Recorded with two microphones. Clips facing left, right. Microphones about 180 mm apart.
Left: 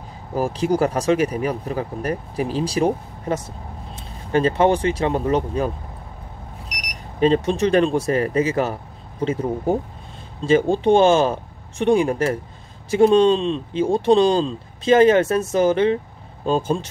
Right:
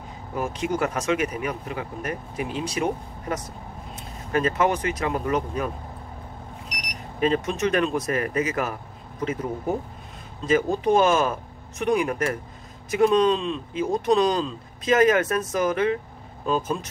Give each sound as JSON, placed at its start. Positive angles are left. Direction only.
{"t": 0.3, "sound": "speech", "side_deg": 35}
{"t": 7.2, "sound": "speech", "side_deg": 30}